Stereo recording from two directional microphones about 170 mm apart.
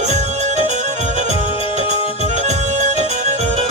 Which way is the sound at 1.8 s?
45° right (ahead or behind).